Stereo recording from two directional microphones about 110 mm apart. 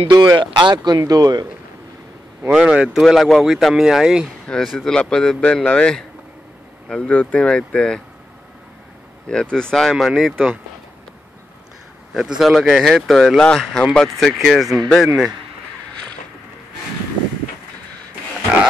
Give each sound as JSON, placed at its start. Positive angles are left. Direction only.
{"t": 0.1, "sound": "speech", "side_deg": -40}
{"t": 0.9, "sound": "speech", "side_deg": -35}
{"t": 2.5, "sound": "speech", "side_deg": -5}
{"t": 4.5, "sound": "speech", "side_deg": 5}
{"t": 9.3, "sound": "speech", "side_deg": 5}
{"t": 12.1, "sound": "speech", "side_deg": -5}